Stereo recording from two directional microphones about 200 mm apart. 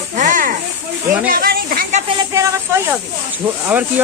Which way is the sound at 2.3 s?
15° right (ahead or behind).